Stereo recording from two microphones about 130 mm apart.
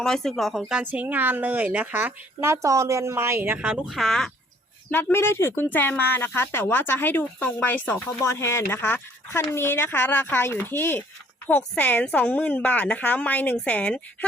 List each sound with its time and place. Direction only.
0.0 s speech: 5° left (ahead or behind)
3.8 s speech: centre (ahead or behind)
4.9 s speech: 15° left (ahead or behind)